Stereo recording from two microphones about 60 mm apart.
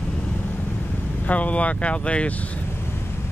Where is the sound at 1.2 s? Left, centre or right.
Left.